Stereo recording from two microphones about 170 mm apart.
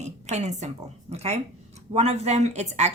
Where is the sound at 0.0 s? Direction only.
40° right (ahead or behind).